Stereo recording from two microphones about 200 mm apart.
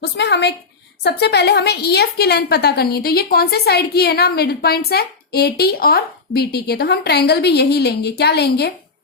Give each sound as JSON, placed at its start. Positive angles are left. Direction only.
{"t": 0.0, "sound": "a woman's voice", "side_deg": 60}